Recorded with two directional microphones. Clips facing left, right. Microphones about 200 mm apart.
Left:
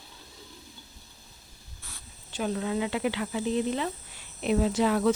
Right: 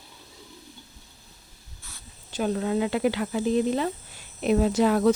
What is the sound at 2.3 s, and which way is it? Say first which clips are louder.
Speech: right 4 dB; 45° right (ahead or behind).